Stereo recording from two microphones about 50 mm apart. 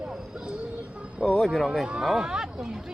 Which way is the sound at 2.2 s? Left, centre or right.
Centre.